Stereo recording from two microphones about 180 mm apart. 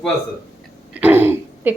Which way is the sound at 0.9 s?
10° right (ahead or behind).